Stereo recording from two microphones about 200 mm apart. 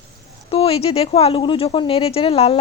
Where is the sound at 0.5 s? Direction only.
30° left (ahead or behind).